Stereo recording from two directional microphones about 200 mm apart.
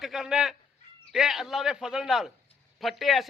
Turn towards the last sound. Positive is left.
turn(degrees=0)  # may be behind; listen again after turning